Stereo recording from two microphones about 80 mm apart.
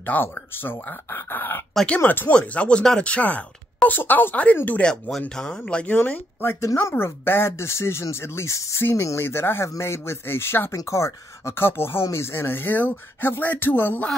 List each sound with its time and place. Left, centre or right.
0.0 s speech: left
5.9 s speech: left
6.6 s speech: left